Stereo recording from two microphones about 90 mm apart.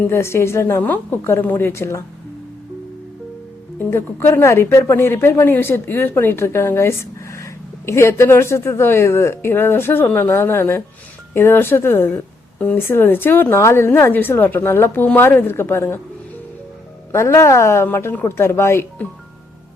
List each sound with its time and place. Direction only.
0.0 s speech: 30° left (ahead or behind)
3.8 s speech: 25° left (ahead or behind)
17.1 s a woman's voice: 30° left (ahead or behind)